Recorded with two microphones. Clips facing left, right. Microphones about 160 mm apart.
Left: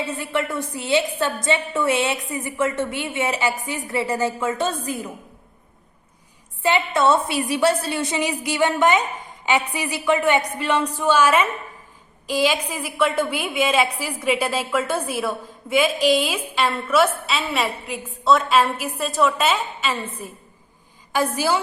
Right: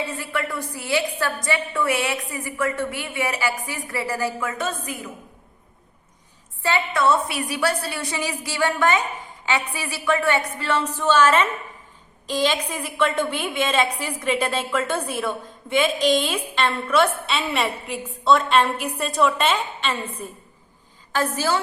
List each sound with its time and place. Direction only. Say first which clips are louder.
0.2 s a woman's voice: left 3 dB; 20° left (ahead or behind)
6.6 s a woman's voice: left 3 dB; 20° left (ahead or behind)